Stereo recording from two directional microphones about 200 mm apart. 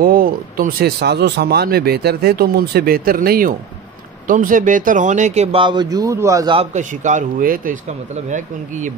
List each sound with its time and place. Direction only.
0.0 s speech: 45° right (ahead or behind); by 6.5 s 15° right (ahead or behind)
6.5 s speech: 35° right (ahead or behind)